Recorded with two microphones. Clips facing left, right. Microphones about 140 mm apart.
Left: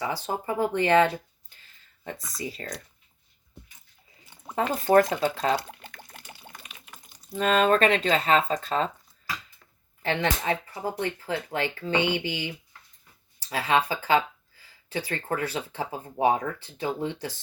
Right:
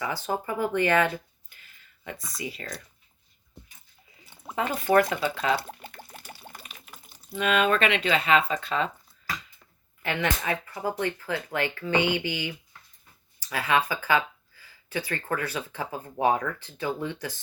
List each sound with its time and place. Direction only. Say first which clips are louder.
0.0 s speech: even; 25° left (ahead or behind)
4.5 s speech: left 2 dB; 35° left (ahead or behind)
5.6 s a sound: right 3 dB; 5° right (ahead or behind)
7.3 s speech: left 2 dB; 35° left (ahead or behind)
10.0 s speech: left 2 dB; 30° left (ahead or behind)